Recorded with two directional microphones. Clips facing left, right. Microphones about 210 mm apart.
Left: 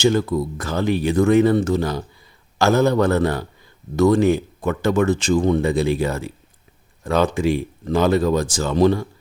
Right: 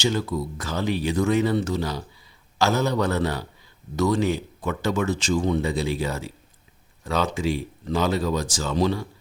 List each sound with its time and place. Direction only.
0.0 s speech: 50° left (ahead or behind)